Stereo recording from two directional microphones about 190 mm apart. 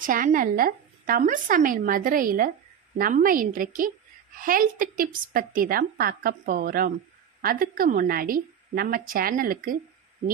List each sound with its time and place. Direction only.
0.0 s a woman's voice: 45° right (ahead or behind)